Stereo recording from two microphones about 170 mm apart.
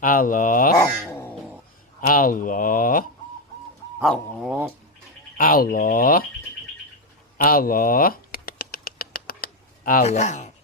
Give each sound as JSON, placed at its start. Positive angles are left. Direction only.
{"t": 0.0, "sound": "speech", "side_deg": 55}
{"t": 1.0, "sound": "cat", "side_deg": 10}
{"t": 2.0, "sound": "speech", "side_deg": 55}
{"t": 4.0, "sound": "speech", "side_deg": 5}
{"t": 5.4, "sound": "speech", "side_deg": 60}
{"t": 7.3, "sound": "a sound", "side_deg": 60}
{"t": 10.1, "sound": "speech", "side_deg": 40}